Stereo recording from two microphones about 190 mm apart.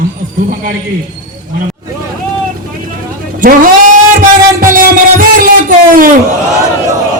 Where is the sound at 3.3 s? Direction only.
45° right (ahead or behind).